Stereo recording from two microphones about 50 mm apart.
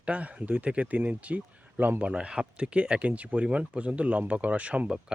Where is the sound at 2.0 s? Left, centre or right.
Right.